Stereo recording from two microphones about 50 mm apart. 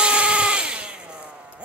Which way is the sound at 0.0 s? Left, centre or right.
Right.